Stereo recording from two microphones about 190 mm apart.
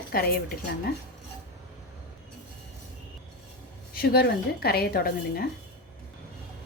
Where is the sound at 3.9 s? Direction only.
55° left (ahead or behind).